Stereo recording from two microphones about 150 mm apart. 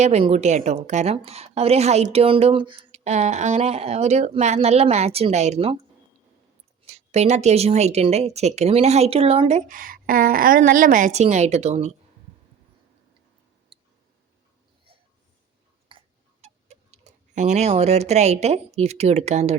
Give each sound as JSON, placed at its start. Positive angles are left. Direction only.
{"t": 0.0, "sound": "speech", "side_deg": -45}
{"t": 3.0, "sound": "speech", "side_deg": -50}
{"t": 6.8, "sound": "speech", "side_deg": -45}
{"t": 9.6, "sound": "a woman's voice", "side_deg": -70}
{"t": 16.4, "sound": "speech", "side_deg": -45}